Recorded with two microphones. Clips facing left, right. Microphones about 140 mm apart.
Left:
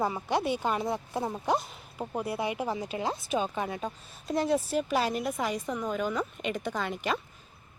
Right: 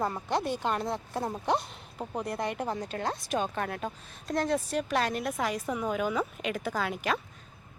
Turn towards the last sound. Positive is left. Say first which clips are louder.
# right 1 dB
turn(degrees=0)  # may be behind; listen again after turning